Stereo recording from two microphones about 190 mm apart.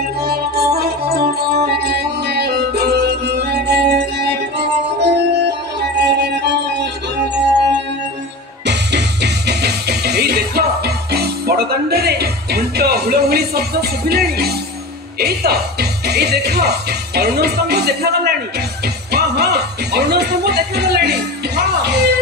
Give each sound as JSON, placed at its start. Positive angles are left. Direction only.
{"t": 0.2, "sound": "music", "side_deg": -55}
{"t": 8.6, "sound": "music", "side_deg": -65}
{"t": 15.1, "sound": "speech", "side_deg": -55}
{"t": 21.5, "sound": "music", "side_deg": -60}